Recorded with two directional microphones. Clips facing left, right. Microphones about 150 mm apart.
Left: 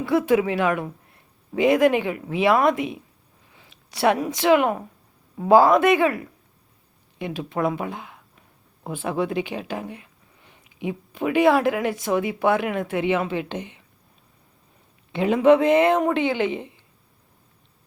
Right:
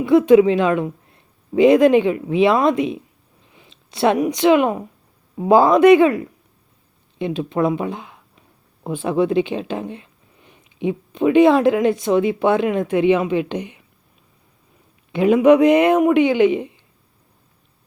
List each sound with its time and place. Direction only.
0.0 s a woman's voice: 20° right (ahead or behind)
15.1 s speech: 15° right (ahead or behind)